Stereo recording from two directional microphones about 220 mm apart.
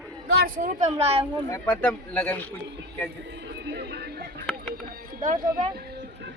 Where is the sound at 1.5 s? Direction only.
10° left (ahead or behind).